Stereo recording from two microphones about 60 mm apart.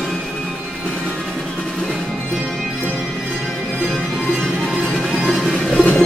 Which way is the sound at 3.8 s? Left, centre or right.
Centre.